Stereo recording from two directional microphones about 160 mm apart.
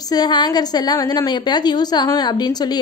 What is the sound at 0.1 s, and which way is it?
A woman's voice, 25° left (ahead or behind).